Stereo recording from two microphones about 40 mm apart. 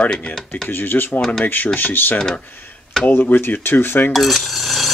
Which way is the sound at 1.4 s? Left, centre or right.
Left.